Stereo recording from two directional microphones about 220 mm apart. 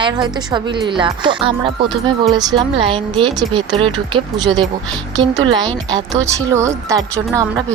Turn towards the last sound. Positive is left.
turn(degrees=-15)  # may be behind; listen again after turning